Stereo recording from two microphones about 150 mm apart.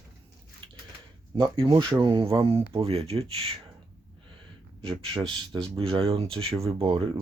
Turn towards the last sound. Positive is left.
turn(degrees=-40)  # may be behind; listen again after turning